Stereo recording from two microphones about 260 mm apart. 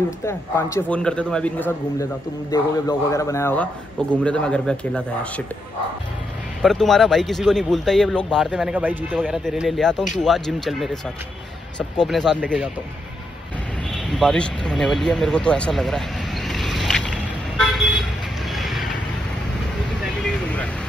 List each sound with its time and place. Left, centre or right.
0.2 s a man's voice: centre
6.6 s speech: centre
12.0 s speech: centre
13.9 s speech: centre
16.4 s boat: centre
18.5 s vehicle: centre